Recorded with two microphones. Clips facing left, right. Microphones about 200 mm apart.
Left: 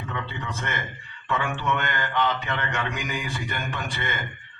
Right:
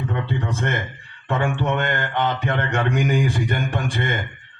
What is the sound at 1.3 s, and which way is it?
A man's voice, 50° right (ahead or behind).